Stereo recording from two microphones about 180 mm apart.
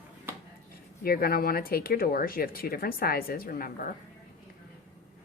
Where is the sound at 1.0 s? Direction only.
55° left (ahead or behind).